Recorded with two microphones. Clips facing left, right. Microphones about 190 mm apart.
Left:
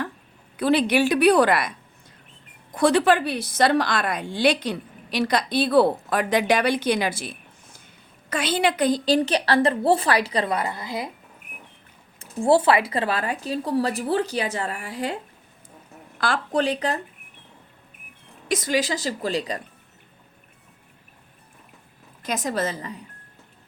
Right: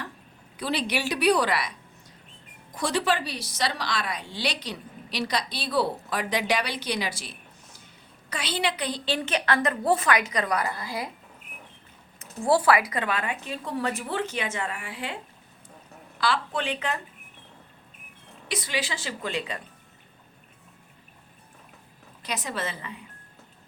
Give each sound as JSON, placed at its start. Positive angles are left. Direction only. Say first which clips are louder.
{"t": 0.5, "sound": "a woman's voice", "louder": "left 9 dB", "side_deg": 55}
{"t": 12.2, "sound": "speech", "louder": "left 4 dB", "side_deg": 25}
{"t": 18.4, "sound": "speech", "louder": "left 8 dB", "side_deg": 45}
{"t": 22.2, "sound": "speech", "louder": "left 6 dB", "side_deg": 45}